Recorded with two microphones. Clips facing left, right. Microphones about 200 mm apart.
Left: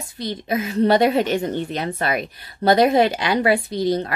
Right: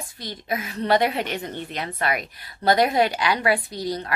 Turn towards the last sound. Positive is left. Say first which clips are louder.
# left 7 dB
turn(degrees=25)  # may be behind; listen again after turning